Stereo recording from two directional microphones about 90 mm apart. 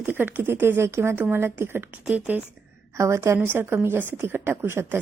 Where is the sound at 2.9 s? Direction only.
30° right (ahead or behind).